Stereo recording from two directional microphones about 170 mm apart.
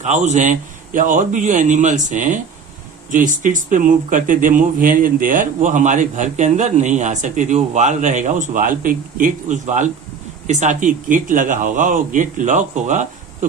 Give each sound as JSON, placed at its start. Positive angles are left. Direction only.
{"t": 0.0, "sound": "speech", "side_deg": -45}